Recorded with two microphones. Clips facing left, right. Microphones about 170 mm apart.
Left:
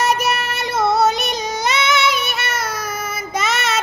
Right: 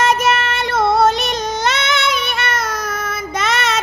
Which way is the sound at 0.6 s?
55° right (ahead or behind).